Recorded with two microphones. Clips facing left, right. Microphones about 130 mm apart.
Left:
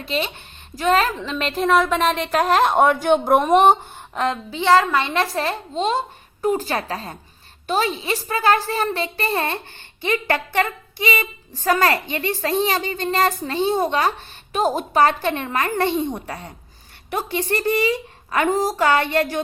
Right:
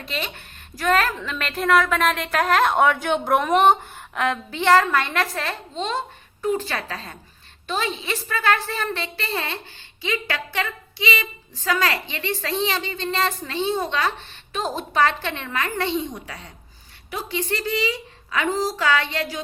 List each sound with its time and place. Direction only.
0.0 s a woman's voice: 30° left (ahead or behind)
2.0 s a woman's voice: 5° left (ahead or behind)
2.9 s a woman's voice: 40° left (ahead or behind)
3.7 s speech: 30° left (ahead or behind)
4.3 s a woman's voice: 15° left (ahead or behind); by 19.4 s 55° left (ahead or behind)